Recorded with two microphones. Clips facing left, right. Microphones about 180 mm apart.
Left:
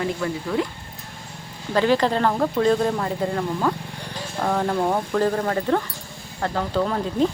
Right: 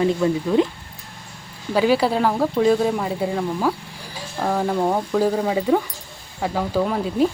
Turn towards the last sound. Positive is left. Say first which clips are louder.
# right 2 dB
turn(degrees=-5)  # may be behind; listen again after turning